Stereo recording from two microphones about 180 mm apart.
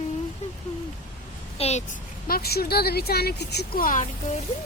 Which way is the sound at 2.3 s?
60° left (ahead or behind).